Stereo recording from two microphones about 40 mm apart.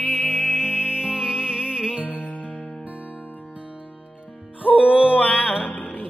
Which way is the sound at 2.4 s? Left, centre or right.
Right.